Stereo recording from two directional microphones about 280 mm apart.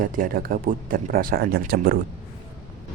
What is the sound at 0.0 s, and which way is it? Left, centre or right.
Speech, right.